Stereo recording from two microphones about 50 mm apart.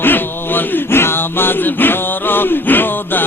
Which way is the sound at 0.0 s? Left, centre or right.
Left.